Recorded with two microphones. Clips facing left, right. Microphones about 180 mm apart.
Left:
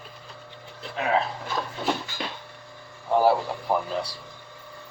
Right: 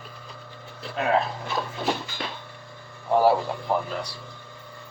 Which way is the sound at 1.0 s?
Centre (ahead or behind).